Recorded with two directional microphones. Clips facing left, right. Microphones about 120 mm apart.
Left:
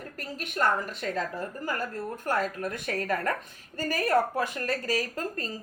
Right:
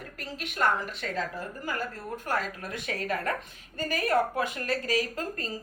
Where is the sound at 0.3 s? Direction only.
40° left (ahead or behind).